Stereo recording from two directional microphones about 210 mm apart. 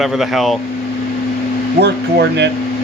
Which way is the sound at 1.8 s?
55° right (ahead or behind).